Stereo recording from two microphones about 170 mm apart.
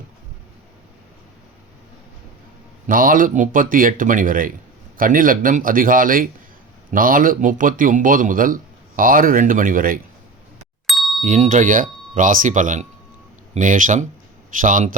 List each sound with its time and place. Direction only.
2.8 s a man's voice: 55° right (ahead or behind)
10.8 s ding: centre (ahead or behind)
11.2 s a man's voice: 50° right (ahead or behind)